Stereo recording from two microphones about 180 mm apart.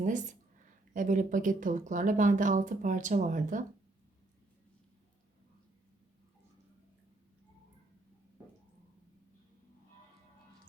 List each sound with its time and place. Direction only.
0.0 s speech: 45° right (ahead or behind)